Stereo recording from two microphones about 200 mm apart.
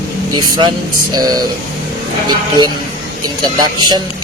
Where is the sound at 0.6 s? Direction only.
20° right (ahead or behind).